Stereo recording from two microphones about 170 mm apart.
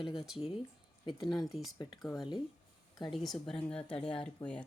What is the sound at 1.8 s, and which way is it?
Speech, 25° left (ahead or behind).